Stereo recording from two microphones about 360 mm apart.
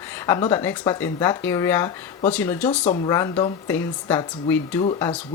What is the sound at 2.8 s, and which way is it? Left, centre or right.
Speech, centre.